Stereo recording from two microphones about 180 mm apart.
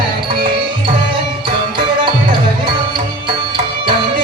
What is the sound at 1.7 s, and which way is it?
Music, 30° right (ahead or behind).